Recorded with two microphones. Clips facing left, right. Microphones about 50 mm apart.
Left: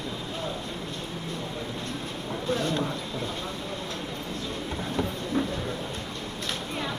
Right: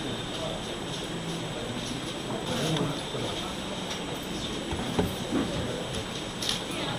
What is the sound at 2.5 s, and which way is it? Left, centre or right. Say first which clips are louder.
Speech: left 1 dB; left.